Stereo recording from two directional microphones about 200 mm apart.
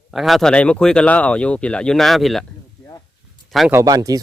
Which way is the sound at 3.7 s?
20° right (ahead or behind).